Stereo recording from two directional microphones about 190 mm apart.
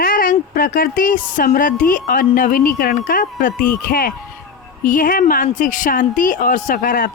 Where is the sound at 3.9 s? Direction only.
50° left (ahead or behind).